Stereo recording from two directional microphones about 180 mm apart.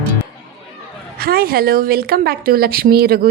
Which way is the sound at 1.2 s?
55° right (ahead or behind).